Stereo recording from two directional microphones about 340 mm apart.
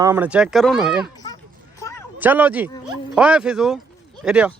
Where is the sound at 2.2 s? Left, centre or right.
Centre.